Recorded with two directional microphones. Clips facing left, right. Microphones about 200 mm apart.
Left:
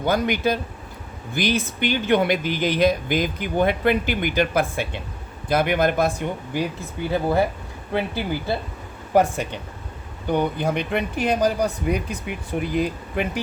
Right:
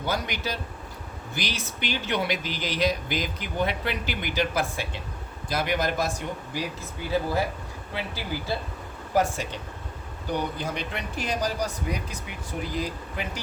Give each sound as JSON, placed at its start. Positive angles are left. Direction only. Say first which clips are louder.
{"t": 0.0, "sound": "speech", "louder": "left 9 dB", "side_deg": 55}